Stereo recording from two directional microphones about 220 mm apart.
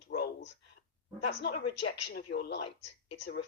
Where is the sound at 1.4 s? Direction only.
50° left (ahead or behind).